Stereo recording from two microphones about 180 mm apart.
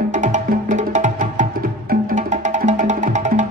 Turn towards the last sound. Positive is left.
turn(degrees=-45)  # may be behind; listen again after turning